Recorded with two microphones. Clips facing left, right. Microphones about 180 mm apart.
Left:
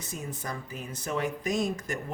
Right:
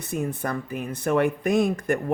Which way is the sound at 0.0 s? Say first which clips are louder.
Right 10 dB; 60° right (ahead or behind).